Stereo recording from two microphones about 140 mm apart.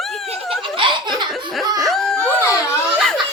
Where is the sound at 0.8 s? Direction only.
35° right (ahead or behind).